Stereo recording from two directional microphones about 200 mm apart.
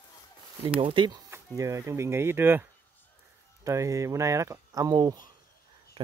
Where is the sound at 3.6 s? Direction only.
15° right (ahead or behind).